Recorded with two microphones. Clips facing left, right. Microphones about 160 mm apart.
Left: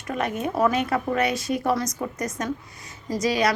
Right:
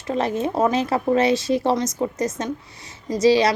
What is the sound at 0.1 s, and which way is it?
A woman's voice, 30° right (ahead or behind).